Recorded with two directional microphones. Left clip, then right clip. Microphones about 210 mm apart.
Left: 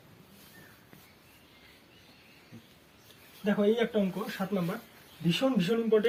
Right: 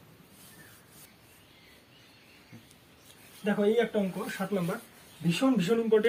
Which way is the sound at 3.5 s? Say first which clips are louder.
Right 1 dB; 20° right (ahead or behind).